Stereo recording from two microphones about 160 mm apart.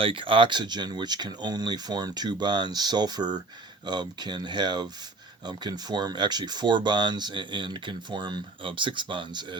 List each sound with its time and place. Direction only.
0.0 s speech: 35° right (ahead or behind)